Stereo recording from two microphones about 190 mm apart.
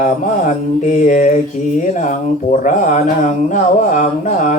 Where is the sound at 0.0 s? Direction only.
40° left (ahead or behind).